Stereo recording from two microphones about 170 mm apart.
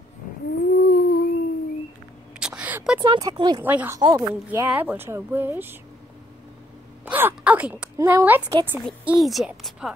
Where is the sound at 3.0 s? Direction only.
30° right (ahead or behind).